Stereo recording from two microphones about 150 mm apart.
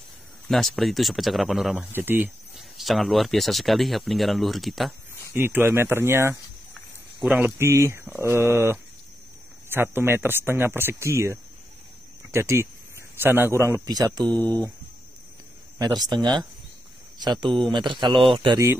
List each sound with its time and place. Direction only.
0.5 s speech: centre (ahead or behind)
1.9 s speech: 15° right (ahead or behind)
2.5 s speech: centre (ahead or behind)
5.3 s speech: 15° right (ahead or behind)
6.7 s a sound: centre (ahead or behind)
7.3 s speech: 15° right (ahead or behind)
15.8 s speech: 25° right (ahead or behind)